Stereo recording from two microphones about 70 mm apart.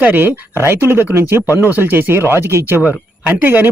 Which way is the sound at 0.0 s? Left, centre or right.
Right.